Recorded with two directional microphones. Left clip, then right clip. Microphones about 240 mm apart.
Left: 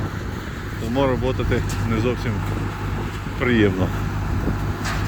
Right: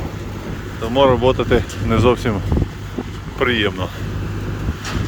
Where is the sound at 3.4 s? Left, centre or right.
Centre.